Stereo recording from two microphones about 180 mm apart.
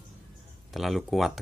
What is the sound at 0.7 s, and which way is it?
Speech, centre (ahead or behind).